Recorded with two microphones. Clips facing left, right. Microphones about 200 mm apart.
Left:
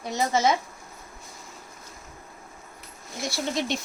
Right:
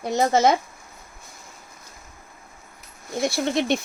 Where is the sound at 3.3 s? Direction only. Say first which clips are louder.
Right 5 dB; 60° right (ahead or behind).